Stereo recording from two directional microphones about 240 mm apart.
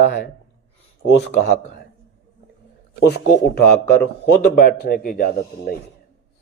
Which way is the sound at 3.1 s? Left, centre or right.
Left.